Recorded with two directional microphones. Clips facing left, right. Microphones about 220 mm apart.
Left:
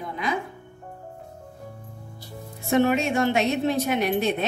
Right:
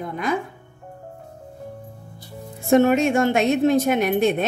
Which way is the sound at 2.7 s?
50° right (ahead or behind).